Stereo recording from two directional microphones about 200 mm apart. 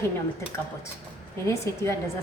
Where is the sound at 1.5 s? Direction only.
15° left (ahead or behind).